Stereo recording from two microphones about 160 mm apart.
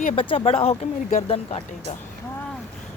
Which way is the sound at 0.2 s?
35° left (ahead or behind).